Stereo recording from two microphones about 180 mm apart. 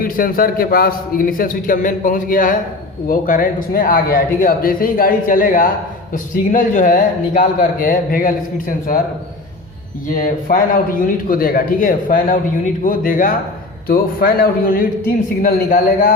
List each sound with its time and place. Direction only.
0.0 s a man's voice: 50° left (ahead or behind)
10.2 s a man's voice: 50° left (ahead or behind)